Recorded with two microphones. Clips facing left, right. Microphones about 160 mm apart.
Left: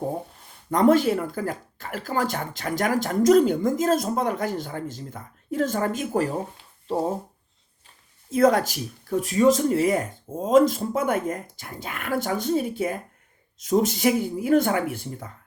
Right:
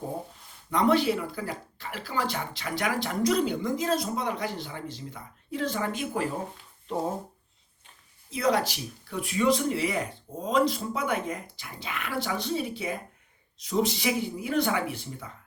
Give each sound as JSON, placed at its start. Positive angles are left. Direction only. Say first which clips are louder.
{"t": 0.7, "sound": "speech", "louder": "left 5 dB", "side_deg": 45}
{"t": 8.3, "sound": "speech", "louder": "left 7 dB", "side_deg": 45}